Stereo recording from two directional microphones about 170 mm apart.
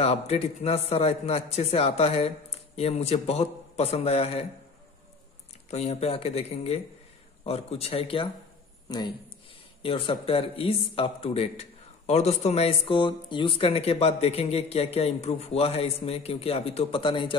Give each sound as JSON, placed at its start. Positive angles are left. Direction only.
{"t": 0.0, "sound": "speech", "side_deg": 40}
{"t": 5.7, "sound": "a man's voice", "side_deg": 40}